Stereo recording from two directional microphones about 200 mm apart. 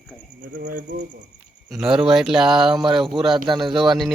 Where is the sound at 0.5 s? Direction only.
45° right (ahead or behind).